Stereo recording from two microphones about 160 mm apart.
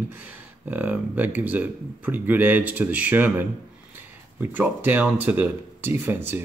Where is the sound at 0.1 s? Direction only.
10° right (ahead or behind).